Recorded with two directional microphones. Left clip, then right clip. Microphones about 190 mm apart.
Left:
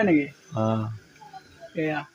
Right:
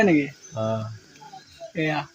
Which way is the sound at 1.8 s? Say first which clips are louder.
Right 2 dB; 55° right (ahead or behind).